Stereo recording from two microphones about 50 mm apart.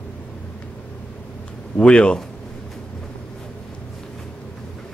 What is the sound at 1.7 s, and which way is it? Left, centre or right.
Speech, left.